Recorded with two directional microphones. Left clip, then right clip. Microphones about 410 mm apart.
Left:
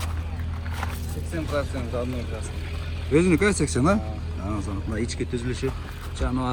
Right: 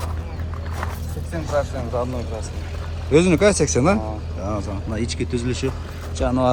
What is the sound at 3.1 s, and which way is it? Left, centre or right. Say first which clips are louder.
Speech: right 5 dB; centre.